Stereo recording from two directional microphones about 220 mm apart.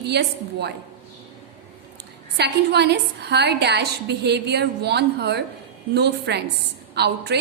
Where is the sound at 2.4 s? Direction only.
50° right (ahead or behind).